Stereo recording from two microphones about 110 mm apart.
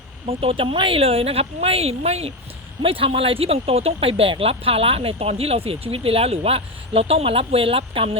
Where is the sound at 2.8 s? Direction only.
55° right (ahead or behind).